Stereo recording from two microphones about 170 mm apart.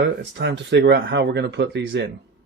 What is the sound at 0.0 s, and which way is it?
Speech, 90° right.